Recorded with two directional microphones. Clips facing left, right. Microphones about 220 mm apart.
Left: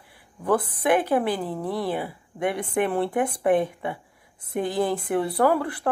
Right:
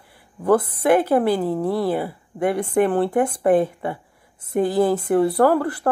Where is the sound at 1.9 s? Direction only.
50° right (ahead or behind).